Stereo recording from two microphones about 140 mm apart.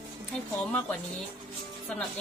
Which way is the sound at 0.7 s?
10° left (ahead or behind).